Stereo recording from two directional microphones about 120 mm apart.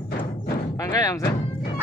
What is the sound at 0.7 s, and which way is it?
Music, 30° left (ahead or behind).